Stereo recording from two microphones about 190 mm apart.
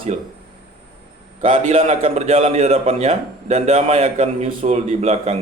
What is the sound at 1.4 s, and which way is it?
A man's voice, 40° right (ahead or behind).